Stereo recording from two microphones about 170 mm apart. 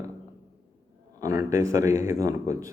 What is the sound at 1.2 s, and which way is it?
Speech, 20° right (ahead or behind).